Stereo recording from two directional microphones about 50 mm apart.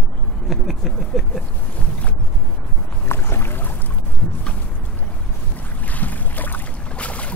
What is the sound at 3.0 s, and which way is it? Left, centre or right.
Boat, left.